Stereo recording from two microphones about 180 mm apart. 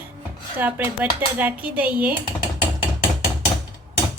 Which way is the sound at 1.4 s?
10° right (ahead or behind).